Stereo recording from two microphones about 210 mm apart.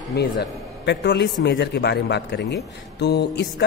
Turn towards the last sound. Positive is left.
turn(degrees=50)  # may be behind; listen again after turning